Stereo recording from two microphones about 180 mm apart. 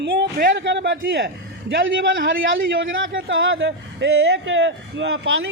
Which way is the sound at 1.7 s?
90° right.